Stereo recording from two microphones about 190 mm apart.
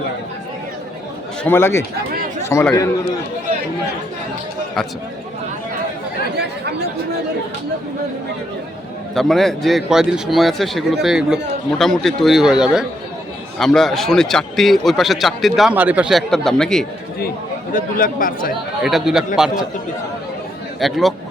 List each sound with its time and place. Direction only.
1.5 s speech: 10° left (ahead or behind)
6.3 s speech: 60° right (ahead or behind)
9.1 s a man's voice: centre (ahead or behind)
17.7 s speech: 45° left (ahead or behind)
18.8 s a man's voice: centre (ahead or behind)
20.7 s a man's voice: centre (ahead or behind)